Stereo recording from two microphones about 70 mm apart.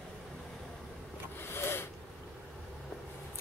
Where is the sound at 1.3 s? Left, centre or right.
Left.